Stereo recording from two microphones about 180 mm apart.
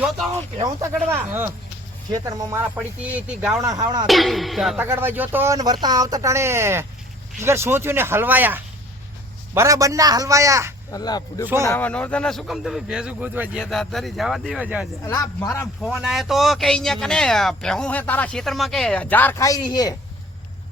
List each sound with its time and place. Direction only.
1.1 s speech: 10° right (ahead or behind)
3.6 s speech: 20° right (ahead or behind)
4.0 s speech: centre (ahead or behind)
4.8 s speech: 10° right (ahead or behind)
10.9 s speech: 20° left (ahead or behind); by 14.8 s 5° right (ahead or behind)
15.0 s speech: 15° left (ahead or behind)
15.8 s speech: centre (ahead or behind); by 20.0 s 20° left (ahead or behind)